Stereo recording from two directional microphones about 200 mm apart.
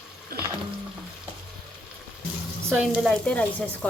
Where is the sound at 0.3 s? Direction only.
50° right (ahead or behind).